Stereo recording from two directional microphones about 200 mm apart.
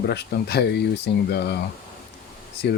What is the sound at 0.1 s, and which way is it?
Speech, 55° left (ahead or behind).